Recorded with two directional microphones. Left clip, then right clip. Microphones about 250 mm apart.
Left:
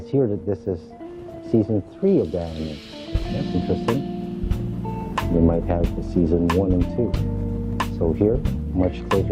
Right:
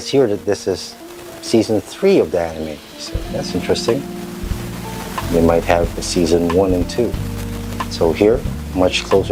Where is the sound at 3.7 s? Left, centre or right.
Centre.